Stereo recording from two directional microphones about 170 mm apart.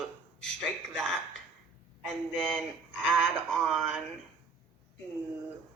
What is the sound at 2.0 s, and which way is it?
Speech, 5° left (ahead or behind).